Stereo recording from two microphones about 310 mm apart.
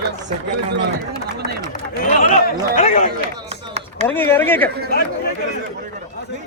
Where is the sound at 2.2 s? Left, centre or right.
Left.